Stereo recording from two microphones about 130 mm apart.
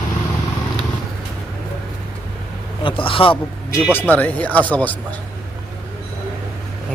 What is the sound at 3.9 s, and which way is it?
Speech, 15° left (ahead or behind).